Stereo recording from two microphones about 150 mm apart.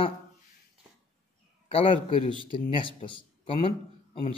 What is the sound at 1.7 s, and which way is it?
Speech, 35° left (ahead or behind).